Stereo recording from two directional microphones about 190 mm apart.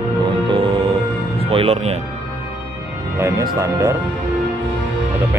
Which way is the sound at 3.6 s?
15° right (ahead or behind).